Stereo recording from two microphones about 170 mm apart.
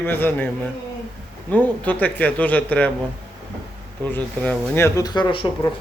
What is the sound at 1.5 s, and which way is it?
Speech, 10° left (ahead or behind).